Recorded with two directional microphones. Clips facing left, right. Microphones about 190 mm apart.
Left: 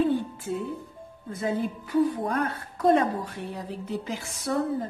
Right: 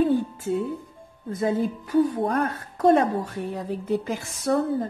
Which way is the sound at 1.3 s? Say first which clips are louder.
Right 4 dB; 45° right (ahead or behind).